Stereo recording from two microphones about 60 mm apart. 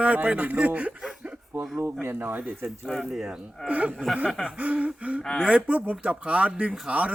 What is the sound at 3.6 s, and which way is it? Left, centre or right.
A man's voice, right.